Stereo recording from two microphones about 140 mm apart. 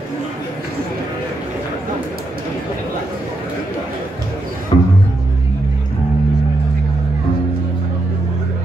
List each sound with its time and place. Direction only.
4.7 s music: 30° left (ahead or behind)